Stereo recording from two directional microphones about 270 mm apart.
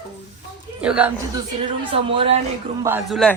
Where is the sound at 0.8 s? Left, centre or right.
Centre.